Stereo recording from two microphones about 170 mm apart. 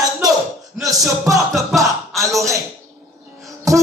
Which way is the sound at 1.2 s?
20° right (ahead or behind).